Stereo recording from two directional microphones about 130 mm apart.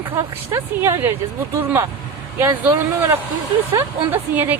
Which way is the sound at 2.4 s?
20° right (ahead or behind).